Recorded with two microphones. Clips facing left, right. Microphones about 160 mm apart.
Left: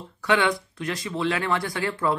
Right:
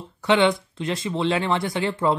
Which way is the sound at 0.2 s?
25° right (ahead or behind).